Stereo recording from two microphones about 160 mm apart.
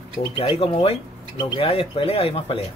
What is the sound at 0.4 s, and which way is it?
Speech, 35° left (ahead or behind).